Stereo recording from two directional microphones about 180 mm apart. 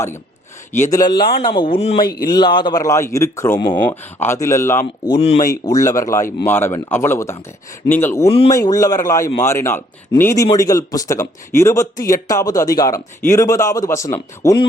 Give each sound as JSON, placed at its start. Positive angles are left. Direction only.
{"t": 0.7, "sound": "a man's voice", "side_deg": 15}
{"t": 5.2, "sound": "speech", "side_deg": 35}
{"t": 5.7, "sound": "a man's voice", "side_deg": 20}
{"t": 8.3, "sound": "speech", "side_deg": 35}
{"t": 8.5, "sound": "a man's voice", "side_deg": 20}